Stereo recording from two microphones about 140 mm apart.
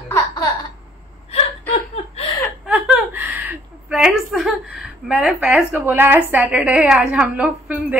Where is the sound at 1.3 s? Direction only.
45° left (ahead or behind).